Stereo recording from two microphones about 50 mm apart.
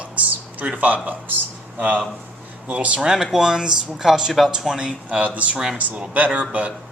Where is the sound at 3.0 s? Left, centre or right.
Centre.